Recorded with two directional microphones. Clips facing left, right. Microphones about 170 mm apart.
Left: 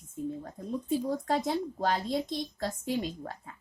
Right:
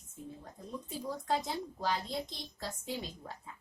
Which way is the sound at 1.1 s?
60° left (ahead or behind).